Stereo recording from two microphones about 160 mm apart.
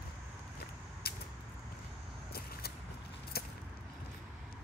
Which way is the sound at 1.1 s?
75° left (ahead or behind).